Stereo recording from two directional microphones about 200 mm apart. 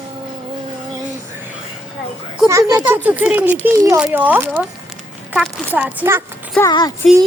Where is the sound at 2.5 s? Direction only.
15° right (ahead or behind).